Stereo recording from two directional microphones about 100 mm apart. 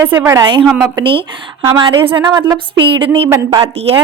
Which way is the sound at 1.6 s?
50° right (ahead or behind).